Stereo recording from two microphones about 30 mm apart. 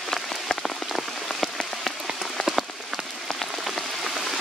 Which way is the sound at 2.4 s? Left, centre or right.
Centre.